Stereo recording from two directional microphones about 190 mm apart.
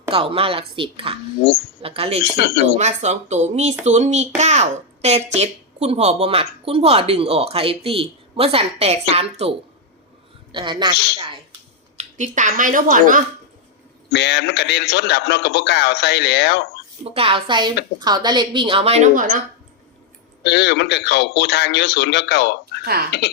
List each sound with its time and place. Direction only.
0.1 s a woman's voice: 30° right (ahead or behind)
2.4 s a man's voice: 60° left (ahead or behind)
2.7 s a child's voice: 35° right (ahead or behind)
11.9 s speech: 40° right (ahead or behind)
14.1 s a man's voice: 60° left (ahead or behind)
17.0 s a woman's voice: 30° right (ahead or behind)
20.4 s a man's voice: 65° left (ahead or behind)
22.8 s speech: 55° right (ahead or behind)